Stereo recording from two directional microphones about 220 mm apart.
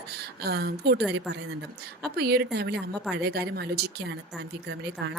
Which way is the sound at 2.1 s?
45° right (ahead or behind).